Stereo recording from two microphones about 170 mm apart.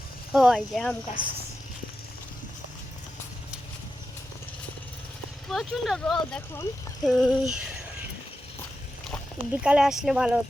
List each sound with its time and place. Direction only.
0.3 s speech: centre (ahead or behind)
1.2 s a woman's voice: 25° right (ahead or behind)
5.5 s speech: centre (ahead or behind)
9.6 s speech: 5° right (ahead or behind)